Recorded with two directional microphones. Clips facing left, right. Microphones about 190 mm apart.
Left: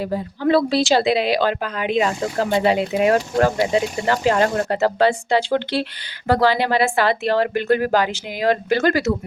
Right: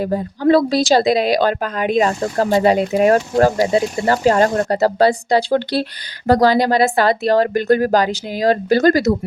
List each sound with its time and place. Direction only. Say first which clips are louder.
0.0 s speech: right 4 dB; 45° right (ahead or behind)